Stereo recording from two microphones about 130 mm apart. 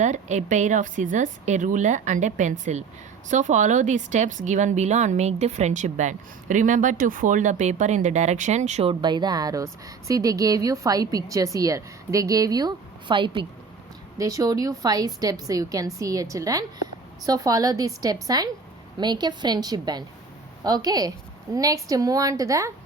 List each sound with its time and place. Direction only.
0.0 s speech: 65° right (ahead or behind)
8.9 s a woman's voice: 35° right (ahead or behind)
14.2 s a woman's voice: 25° right (ahead or behind)